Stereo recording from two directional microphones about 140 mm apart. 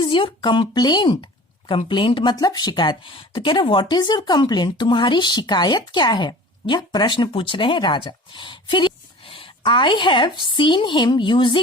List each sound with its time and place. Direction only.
0.0 s speech: 35° left (ahead or behind)